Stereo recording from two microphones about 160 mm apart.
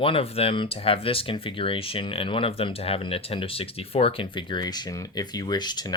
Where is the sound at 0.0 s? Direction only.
35° left (ahead or behind).